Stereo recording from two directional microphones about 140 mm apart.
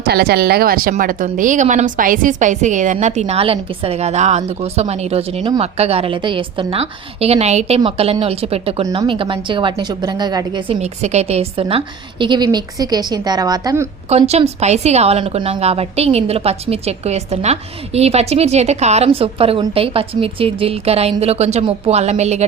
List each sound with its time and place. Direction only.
0.0 s a woman's voice: 90° right; by 10.8 s 30° right (ahead or behind)
10.8 s a woman's voice: 50° right (ahead or behind)
12.2 s a woman's voice: 30° right (ahead or behind)
14.1 s a woman's voice: 50° right (ahead or behind)